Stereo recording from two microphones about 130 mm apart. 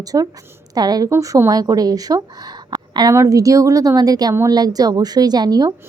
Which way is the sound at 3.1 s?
25° right (ahead or behind).